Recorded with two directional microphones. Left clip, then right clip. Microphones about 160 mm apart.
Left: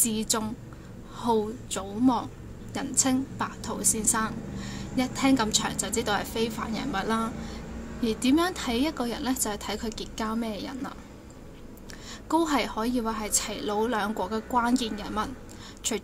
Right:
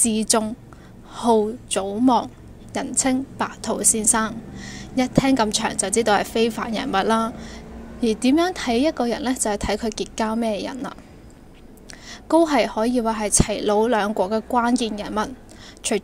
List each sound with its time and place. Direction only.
0.0 s a woman's voice: 45° right (ahead or behind)
12.1 s a woman's voice: 35° right (ahead or behind)